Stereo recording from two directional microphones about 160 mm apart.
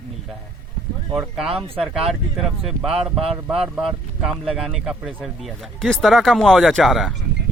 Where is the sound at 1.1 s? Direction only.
5° right (ahead or behind).